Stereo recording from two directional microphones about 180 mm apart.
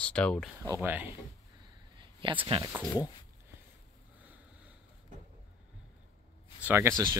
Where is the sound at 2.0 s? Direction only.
25° right (ahead or behind).